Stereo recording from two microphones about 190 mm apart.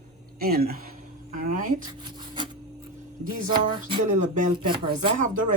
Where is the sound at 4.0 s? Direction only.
40° right (ahead or behind).